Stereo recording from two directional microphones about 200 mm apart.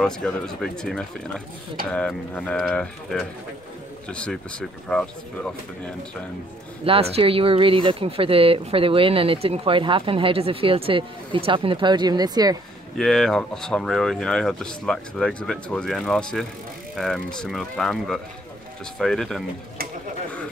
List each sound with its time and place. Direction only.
0.0 s speech: 5° left (ahead or behind)
6.8 s speech: 30° right (ahead or behind)
12.9 s speech: centre (ahead or behind)